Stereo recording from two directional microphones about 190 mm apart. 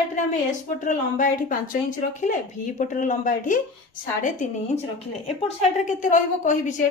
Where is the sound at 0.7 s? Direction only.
45° left (ahead or behind).